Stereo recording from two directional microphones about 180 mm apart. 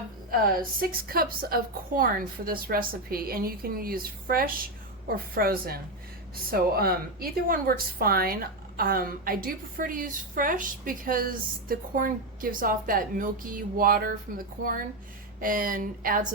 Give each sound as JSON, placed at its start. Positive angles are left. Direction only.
{"t": 0.3, "sound": "a woman's voice", "side_deg": -55}